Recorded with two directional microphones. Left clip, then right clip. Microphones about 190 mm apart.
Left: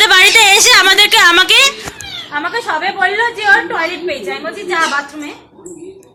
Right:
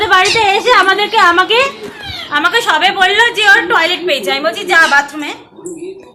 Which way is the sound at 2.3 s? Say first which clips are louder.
Right 7 dB; 20° right (ahead or behind).